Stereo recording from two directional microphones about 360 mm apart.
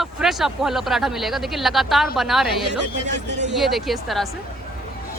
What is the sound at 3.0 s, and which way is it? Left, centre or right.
Speech, centre.